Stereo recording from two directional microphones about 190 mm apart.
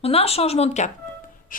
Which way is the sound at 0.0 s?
30° left (ahead or behind).